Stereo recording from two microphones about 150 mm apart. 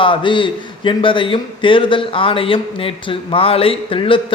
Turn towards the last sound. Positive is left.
turn(degrees=35)  # may be behind; listen again after turning